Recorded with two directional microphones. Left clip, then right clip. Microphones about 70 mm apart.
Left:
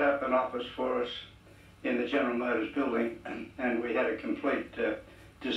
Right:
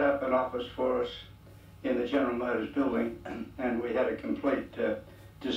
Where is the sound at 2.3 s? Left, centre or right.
Centre.